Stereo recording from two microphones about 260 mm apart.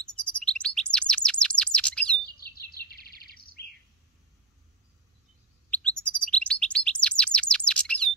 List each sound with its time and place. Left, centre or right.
0.2 s chirp: centre
2.7 s bird: left
5.7 s chirp: centre